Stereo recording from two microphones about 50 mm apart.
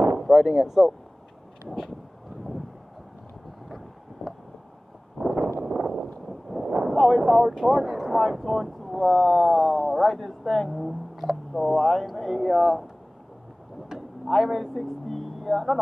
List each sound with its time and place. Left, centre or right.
0.2 s speech: centre
3.6 s wind noise: centre
5.2 s a sound: centre
7.0 s speech: centre
13.8 s a sound: centre
14.8 s speech: centre